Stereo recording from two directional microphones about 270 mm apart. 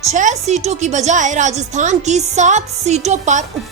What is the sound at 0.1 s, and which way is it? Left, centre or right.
A woman's voice, right.